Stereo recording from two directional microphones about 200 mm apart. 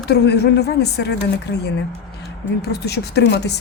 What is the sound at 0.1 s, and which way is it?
A woman's voice, 55° left (ahead or behind).